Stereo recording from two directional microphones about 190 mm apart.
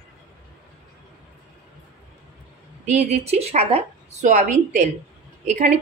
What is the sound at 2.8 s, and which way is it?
Speech, 40° right (ahead or behind).